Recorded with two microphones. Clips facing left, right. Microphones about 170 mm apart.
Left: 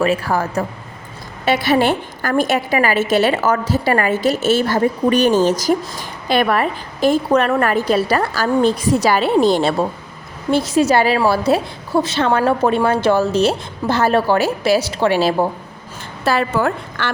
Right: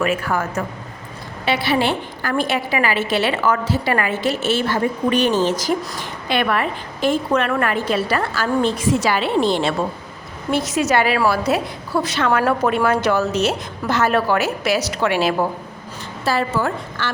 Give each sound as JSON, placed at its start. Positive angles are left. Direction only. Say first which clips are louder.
{"t": 0.0, "sound": "a woman's voice", "louder": "left 3 dB", "side_deg": 35}
{"t": 1.5, "sound": "a woman's voice", "louder": "left 4 dB", "side_deg": 45}
{"t": 16.2, "sound": "a woman's voice", "louder": "left 3 dB", "side_deg": 60}